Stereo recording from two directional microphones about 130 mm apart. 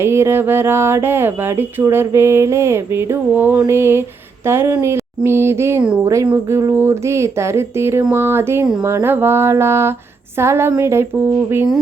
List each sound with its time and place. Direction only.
0.0 s speech: 20° right (ahead or behind)